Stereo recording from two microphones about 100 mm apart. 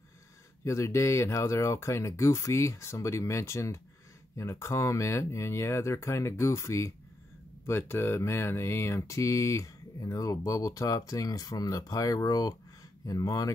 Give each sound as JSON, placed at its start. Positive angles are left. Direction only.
{"t": 0.7, "sound": "speech", "side_deg": 30}